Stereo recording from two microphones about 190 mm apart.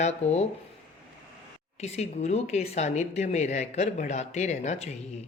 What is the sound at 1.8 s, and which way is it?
Speech, 35° left (ahead or behind).